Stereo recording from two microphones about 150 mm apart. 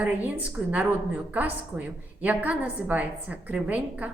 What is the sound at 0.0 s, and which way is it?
A woman's voice, 10° right (ahead or behind).